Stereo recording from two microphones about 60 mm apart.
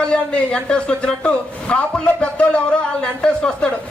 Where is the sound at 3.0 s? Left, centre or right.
Centre.